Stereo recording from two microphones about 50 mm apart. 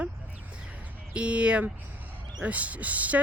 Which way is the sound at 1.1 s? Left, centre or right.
Right.